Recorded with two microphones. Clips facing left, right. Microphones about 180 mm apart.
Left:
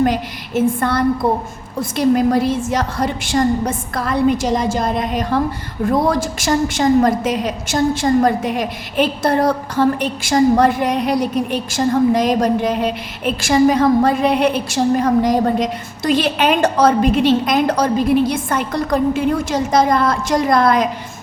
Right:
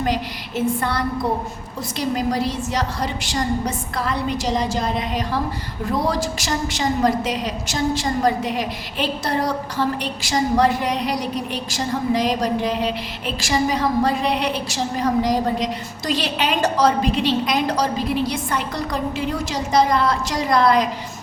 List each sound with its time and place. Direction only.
0.0 s a woman's voice: 50° left (ahead or behind)